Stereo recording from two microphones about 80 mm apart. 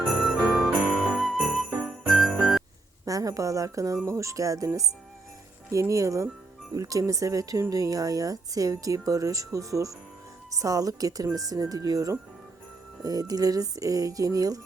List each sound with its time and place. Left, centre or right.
0.0 s jingle bell: centre
3.1 s speech: right